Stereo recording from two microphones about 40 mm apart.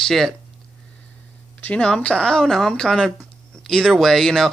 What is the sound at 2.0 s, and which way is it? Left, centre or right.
Speech, left.